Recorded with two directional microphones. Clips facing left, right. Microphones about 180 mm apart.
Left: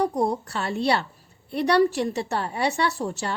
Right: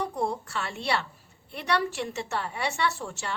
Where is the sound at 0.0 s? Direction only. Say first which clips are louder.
Left 6 dB; 40° left (ahead or behind).